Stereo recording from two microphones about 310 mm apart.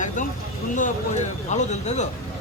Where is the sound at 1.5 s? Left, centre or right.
Left.